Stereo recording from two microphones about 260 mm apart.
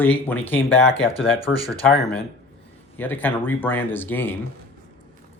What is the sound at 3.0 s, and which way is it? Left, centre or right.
Speech, centre.